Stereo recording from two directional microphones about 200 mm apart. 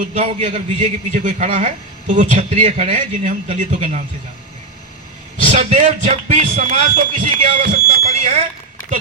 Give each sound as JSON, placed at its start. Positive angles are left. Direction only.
{"t": 0.1, "sound": "speech", "side_deg": -35}
{"t": 5.5, "sound": "speech", "side_deg": -40}